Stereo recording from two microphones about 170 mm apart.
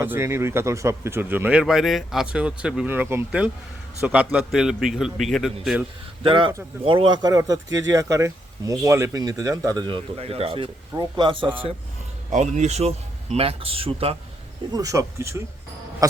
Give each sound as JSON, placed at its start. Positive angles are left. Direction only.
{"t": 0.0, "sound": "a man's voice", "side_deg": -15}
{"t": 6.2, "sound": "speech", "side_deg": -30}
{"t": 12.3, "sound": "speech", "side_deg": -45}
{"t": 14.7, "sound": "speech", "side_deg": -20}